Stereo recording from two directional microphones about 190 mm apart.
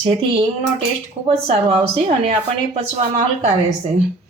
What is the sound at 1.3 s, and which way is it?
A woman's voice, 30° right (ahead or behind).